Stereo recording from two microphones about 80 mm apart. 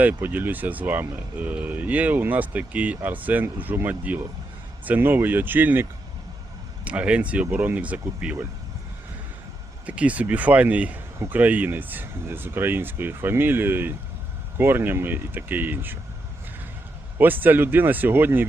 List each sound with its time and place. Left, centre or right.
0.0 s speech: right
9.8 s speech: centre
17.2 s speech: right